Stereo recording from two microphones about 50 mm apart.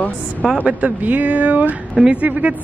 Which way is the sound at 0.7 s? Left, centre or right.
Right.